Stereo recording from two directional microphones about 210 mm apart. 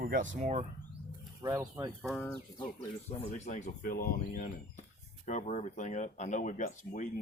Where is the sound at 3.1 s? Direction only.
35° left (ahead or behind).